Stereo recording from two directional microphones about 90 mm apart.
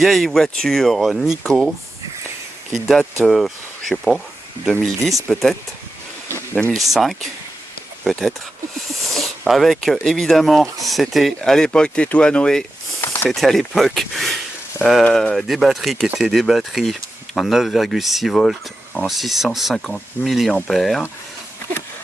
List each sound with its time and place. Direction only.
0.0 s speech: centre (ahead or behind)
2.7 s speech: centre (ahead or behind)
6.5 s speech: 20° left (ahead or behind)
6.7 s speech: centre (ahead or behind)
9.0 s a sound: centre (ahead or behind)
9.4 s speech: centre (ahead or behind)